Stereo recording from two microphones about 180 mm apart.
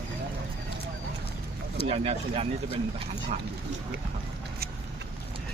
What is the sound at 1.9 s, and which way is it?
Speech, 35° right (ahead or behind).